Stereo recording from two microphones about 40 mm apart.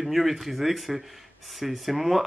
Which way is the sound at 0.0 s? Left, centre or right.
Centre.